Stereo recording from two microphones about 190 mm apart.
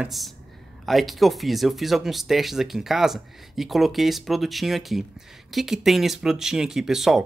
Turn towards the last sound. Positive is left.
turn(degrees=0)  # may be behind; listen again after turning